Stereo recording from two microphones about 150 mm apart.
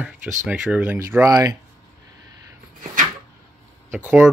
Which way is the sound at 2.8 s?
60° right (ahead or behind).